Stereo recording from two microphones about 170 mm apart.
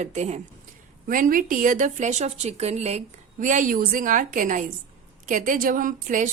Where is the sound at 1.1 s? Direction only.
55° right (ahead or behind).